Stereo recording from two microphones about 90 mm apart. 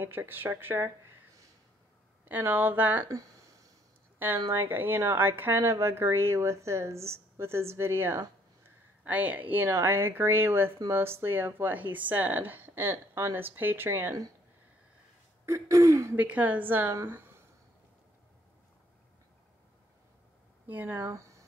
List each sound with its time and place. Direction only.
0.0 s speech: 25° right (ahead or behind)
2.2 s speech: 20° right (ahead or behind)
3.1 s a sound: 40° right (ahead or behind)
4.5 s speech: 25° right (ahead or behind)
15.4 s throat clearing: 35° right (ahead or behind)
16.2 s a woman's voice: 20° right (ahead or behind)
20.6 s speech: 20° right (ahead or behind)
21.1 s a sound: 35° right (ahead or behind)